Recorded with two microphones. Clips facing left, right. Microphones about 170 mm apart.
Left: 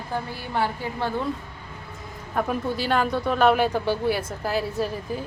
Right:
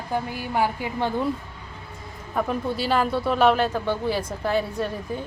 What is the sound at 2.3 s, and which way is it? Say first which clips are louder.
A woman's voice: even; centre (ahead or behind).